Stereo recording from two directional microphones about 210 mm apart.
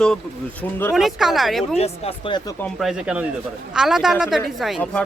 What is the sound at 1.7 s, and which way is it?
Speech, 30° left (ahead or behind).